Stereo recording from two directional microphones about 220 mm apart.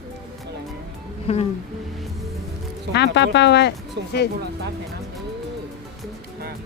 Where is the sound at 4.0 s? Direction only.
50° right (ahead or behind).